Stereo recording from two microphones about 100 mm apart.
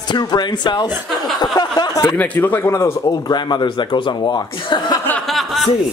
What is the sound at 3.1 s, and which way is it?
Speech, 45° left (ahead or behind).